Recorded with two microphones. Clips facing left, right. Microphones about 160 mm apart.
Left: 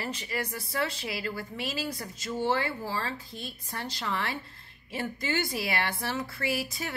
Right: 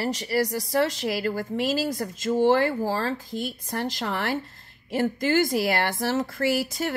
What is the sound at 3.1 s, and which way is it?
Speech, 90° right.